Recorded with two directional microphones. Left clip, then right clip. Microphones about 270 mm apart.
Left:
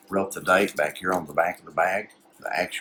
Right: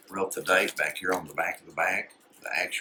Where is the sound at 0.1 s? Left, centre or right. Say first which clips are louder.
Left 3 dB; left.